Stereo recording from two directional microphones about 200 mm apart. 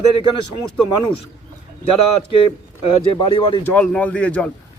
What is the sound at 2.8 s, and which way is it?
Speech, 30° left (ahead or behind).